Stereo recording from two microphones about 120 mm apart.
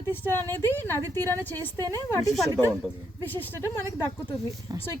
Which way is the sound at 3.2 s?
20° left (ahead or behind).